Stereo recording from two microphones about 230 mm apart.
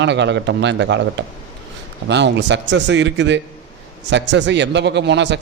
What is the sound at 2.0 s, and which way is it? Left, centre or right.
A man's voice, right.